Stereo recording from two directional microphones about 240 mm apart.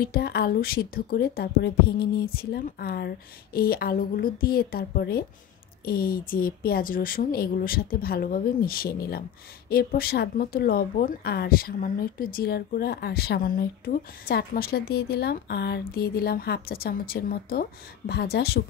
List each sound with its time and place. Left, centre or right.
0.0 s speech: left